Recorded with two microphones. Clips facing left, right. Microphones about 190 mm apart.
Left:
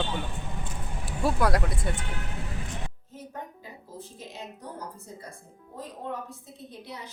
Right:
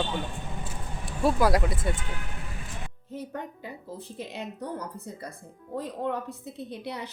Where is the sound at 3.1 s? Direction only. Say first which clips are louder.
Right 8 dB; 65° right (ahead or behind).